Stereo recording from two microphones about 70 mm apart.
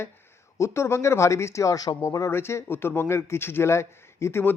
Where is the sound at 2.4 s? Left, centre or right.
Left.